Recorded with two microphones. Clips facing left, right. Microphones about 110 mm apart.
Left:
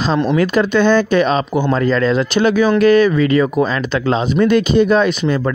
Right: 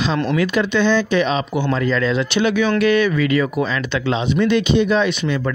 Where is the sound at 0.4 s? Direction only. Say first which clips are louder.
Left 3 dB; 45° left (ahead or behind).